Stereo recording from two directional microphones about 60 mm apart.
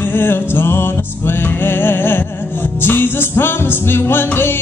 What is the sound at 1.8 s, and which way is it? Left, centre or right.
Music, left.